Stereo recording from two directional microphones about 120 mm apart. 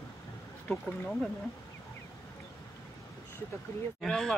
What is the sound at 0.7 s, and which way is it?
Speech, 5° left (ahead or behind).